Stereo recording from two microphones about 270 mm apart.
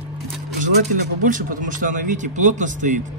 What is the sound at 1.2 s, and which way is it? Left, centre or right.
A man's voice, right.